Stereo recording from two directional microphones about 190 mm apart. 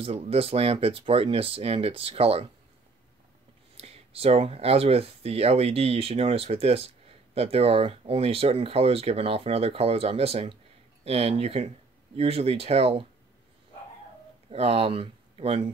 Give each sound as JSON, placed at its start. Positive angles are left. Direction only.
{"t": 0.0, "sound": "speech", "side_deg": -30}
{"t": 3.7, "sound": "speech", "side_deg": -30}
{"t": 14.5, "sound": "speech", "side_deg": -30}